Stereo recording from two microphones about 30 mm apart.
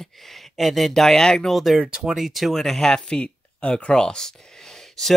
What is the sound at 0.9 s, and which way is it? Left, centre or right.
Speech, centre.